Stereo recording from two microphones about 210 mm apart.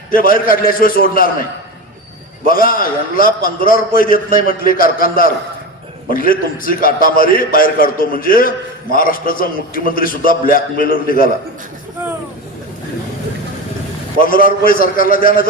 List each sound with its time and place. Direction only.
0.1 s a man's voice: 40° left (ahead or behind)
2.5 s a man's voice: 40° left (ahead or behind)
14.2 s a man's voice: 40° left (ahead or behind)